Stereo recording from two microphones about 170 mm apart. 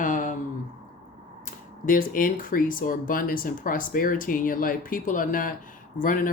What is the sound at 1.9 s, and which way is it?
Speech, 55° left (ahead or behind).